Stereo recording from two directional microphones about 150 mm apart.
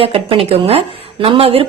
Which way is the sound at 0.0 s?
40° right (ahead or behind).